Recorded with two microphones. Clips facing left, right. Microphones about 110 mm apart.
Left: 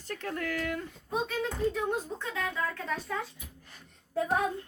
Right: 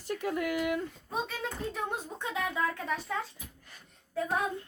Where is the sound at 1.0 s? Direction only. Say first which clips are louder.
Left 3 dB; centre (ahead or behind).